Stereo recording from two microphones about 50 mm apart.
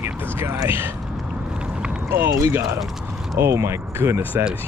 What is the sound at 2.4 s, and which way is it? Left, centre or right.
Speech, right.